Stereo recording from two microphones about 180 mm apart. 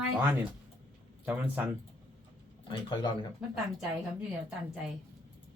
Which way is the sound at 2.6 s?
25° left (ahead or behind).